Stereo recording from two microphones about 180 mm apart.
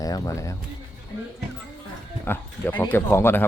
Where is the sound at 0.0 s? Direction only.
20° left (ahead or behind).